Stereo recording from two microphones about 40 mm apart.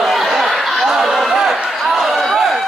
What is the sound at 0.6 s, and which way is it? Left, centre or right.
Chatter, centre.